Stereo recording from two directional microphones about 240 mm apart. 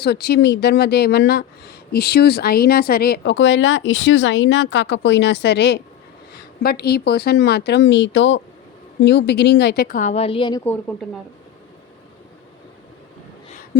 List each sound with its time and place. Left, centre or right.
0.0 s a woman's voice: left
10.6 s a woman's voice: centre